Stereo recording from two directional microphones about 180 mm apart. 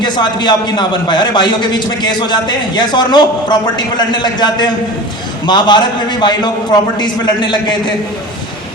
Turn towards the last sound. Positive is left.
turn(degrees=25)  # may be behind; listen again after turning